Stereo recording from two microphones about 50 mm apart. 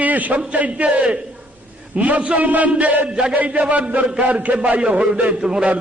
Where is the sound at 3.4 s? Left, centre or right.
Right.